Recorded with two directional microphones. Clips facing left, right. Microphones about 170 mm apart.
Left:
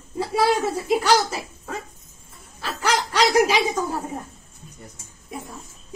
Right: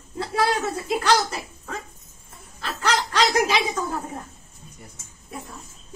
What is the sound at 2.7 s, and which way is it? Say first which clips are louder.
Snicker: left 1 dB; 10° left (ahead or behind).